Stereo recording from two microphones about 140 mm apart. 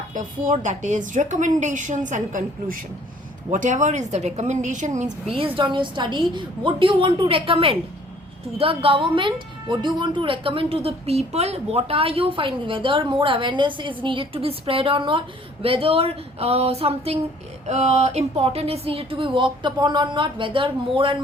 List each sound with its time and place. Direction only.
0.1 s a woman's voice: 65° right (ahead or behind)
5.3 s a woman's voice: 40° right (ahead or behind)